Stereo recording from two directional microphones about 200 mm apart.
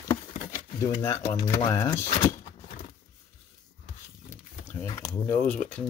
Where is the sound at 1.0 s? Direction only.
15° left (ahead or behind).